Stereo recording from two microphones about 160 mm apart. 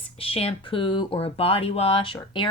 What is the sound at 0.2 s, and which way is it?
Speech, 35° left (ahead or behind).